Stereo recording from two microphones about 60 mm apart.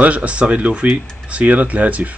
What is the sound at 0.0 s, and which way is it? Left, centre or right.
Speech, right.